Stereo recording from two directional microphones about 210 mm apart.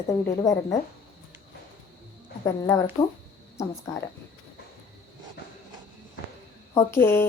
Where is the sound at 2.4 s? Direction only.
15° left (ahead or behind).